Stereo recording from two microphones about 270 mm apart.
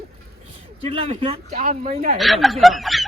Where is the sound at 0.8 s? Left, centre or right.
Right.